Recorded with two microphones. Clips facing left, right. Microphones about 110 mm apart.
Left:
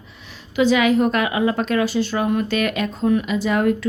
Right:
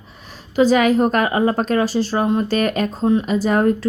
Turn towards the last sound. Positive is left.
turn(degrees=-40)  # may be behind; listen again after turning